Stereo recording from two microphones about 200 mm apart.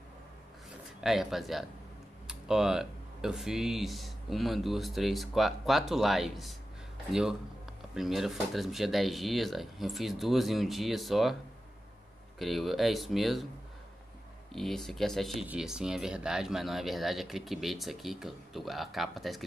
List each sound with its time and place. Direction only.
1.0 s speech: centre (ahead or behind)
12.4 s speech: centre (ahead or behind)
14.5 s speech: centre (ahead or behind)